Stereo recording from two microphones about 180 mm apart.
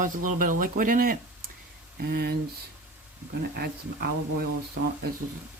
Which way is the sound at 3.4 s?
60° right (ahead or behind).